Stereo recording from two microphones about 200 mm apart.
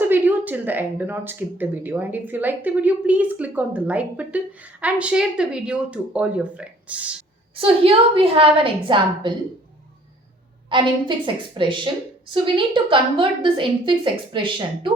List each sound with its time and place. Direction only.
0.0 s a woman's voice: 10° right (ahead or behind)
7.5 s a woman's voice: 25° right (ahead or behind)
10.7 s a woman's voice: 25° right (ahead or behind)